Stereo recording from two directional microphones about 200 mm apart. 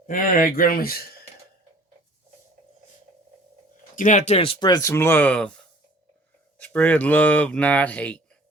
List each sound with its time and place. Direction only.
0.1 s speech: 45° left (ahead or behind)
3.9 s speech: 40° left (ahead or behind); by 5.5 s 5° left (ahead or behind)
6.6 s speech: 5° left (ahead or behind)